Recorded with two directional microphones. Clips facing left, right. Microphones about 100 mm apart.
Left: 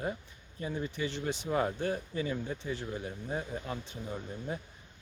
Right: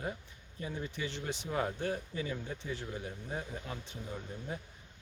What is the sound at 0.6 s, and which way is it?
Speech, 40° left (ahead or behind).